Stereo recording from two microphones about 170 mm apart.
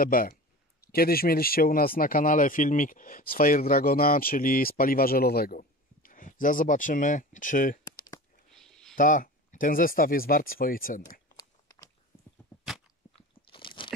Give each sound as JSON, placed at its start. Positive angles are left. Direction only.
{"t": 0.0, "sound": "a man's voice", "side_deg": 60}
{"t": 7.8, "sound": "a sound", "side_deg": 20}
{"t": 8.5, "sound": "a sound", "side_deg": 5}
{"t": 8.9, "sound": "speech", "side_deg": 50}
{"t": 11.3, "sound": "crunch", "side_deg": 20}
{"t": 13.5, "sound": "crunch", "side_deg": 30}